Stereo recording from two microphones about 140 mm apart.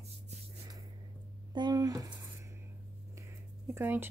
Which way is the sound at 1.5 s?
30° right (ahead or behind).